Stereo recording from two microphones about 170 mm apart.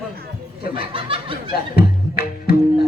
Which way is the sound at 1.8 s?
65° left (ahead or behind).